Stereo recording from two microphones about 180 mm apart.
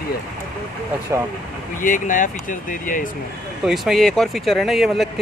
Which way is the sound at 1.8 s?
45° left (ahead or behind).